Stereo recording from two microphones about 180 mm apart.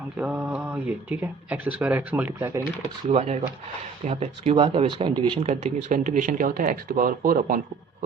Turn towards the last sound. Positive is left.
turn(degrees=-50)  # may be behind; listen again after turning